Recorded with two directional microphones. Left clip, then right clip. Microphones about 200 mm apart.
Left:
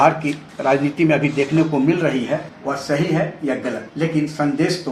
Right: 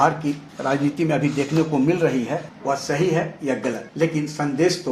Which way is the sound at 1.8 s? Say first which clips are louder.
Left 1 dB; 35° right (ahead or behind).